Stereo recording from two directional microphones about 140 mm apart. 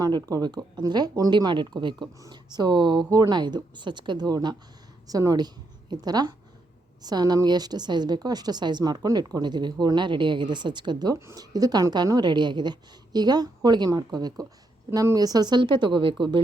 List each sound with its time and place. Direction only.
0.0 s a woman's voice: 25° right (ahead or behind)